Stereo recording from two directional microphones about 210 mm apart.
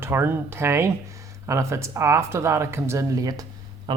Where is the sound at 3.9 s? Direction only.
25° right (ahead or behind).